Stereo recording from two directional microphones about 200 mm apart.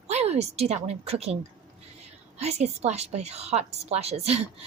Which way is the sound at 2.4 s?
35° right (ahead or behind).